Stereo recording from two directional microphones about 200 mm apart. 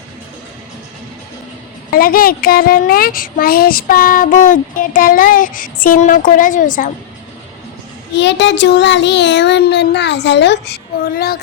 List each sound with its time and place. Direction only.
1.9 s a child's voice: 45° left (ahead or behind)
8.1 s child singing: 60° left (ahead or behind)